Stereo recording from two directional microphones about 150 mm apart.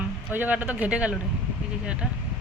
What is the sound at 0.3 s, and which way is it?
Speech, 10° right (ahead or behind).